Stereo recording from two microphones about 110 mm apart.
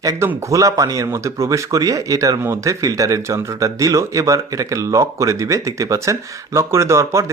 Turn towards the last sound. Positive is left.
turn(degrees=-25)  # may be behind; listen again after turning